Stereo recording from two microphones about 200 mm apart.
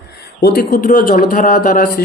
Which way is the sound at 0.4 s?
50° left (ahead or behind).